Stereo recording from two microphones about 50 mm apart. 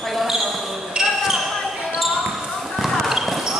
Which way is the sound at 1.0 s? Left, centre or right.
Centre.